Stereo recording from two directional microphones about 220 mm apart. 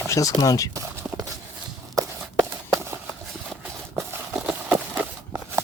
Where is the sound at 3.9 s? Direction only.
5° right (ahead or behind).